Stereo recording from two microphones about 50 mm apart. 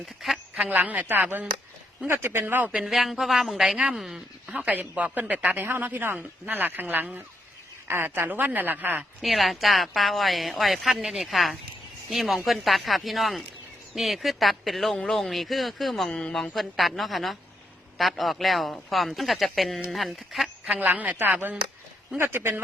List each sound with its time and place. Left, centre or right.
0.0 s a woman's voice: centre
0.5 s speech: right
2.1 s speech: right
2.8 s a woman's voice: centre
4.4 s speech: right
5.6 s speech: right
9.2 s a woman's voice: centre
16.1 s speech: centre
16.4 s a woman's voice: centre
20.7 s speech: right
22.2 s speech: right